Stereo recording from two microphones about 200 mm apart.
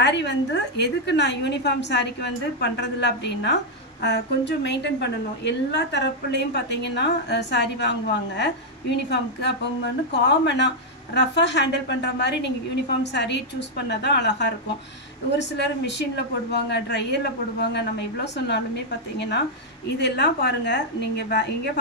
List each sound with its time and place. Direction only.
0.0 s a woman's voice: 60° left (ahead or behind)